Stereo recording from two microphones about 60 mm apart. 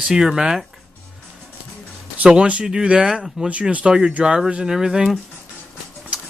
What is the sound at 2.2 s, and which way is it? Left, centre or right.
Speech, centre.